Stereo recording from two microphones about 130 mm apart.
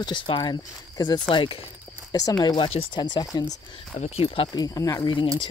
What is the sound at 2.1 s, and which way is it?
Speech, 30° left (ahead or behind).